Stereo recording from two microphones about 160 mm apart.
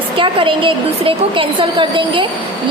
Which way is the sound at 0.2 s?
35° right (ahead or behind).